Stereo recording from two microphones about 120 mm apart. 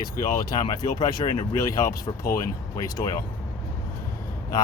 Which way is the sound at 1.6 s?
25° left (ahead or behind).